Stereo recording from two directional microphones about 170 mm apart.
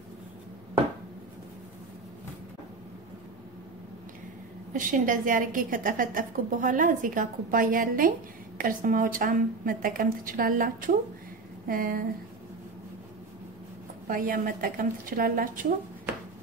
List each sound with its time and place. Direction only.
4.7 s a woman's voice: 50° right (ahead or behind)
14.0 s a woman's voice: 55° right (ahead or behind)